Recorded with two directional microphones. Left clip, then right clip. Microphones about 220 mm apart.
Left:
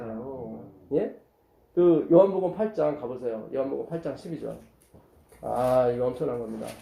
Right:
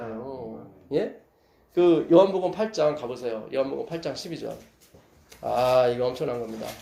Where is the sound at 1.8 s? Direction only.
30° right (ahead or behind).